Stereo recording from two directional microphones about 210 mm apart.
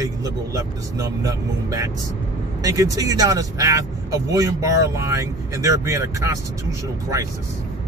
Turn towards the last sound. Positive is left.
turn(degrees=-15)  # may be behind; listen again after turning